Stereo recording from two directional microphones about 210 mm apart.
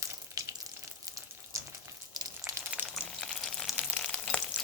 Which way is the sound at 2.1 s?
15° right (ahead or behind).